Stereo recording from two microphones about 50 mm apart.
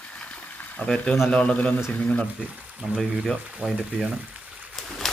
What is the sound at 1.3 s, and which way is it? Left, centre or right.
Speech, left.